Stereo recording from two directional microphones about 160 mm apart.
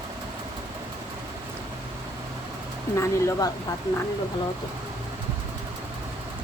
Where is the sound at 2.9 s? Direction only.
20° left (ahead or behind).